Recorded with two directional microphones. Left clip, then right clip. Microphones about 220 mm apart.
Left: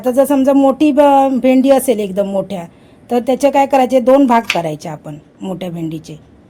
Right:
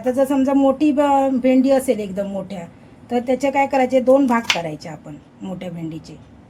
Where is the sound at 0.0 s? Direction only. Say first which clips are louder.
Left 6 dB; 45° left (ahead or behind).